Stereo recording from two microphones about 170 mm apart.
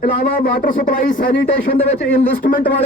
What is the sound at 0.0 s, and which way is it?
A man's voice, 60° left (ahead or behind).